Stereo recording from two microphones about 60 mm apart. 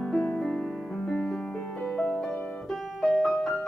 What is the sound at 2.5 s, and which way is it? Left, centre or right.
Music, centre.